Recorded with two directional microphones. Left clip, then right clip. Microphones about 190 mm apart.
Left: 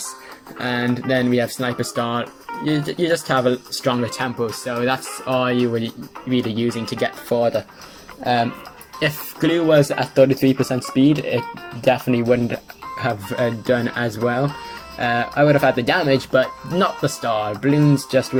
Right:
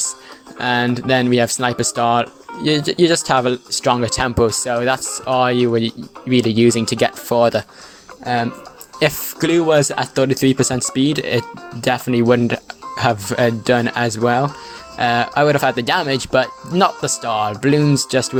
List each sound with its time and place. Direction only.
0.6 s speech: 45° right (ahead or behind)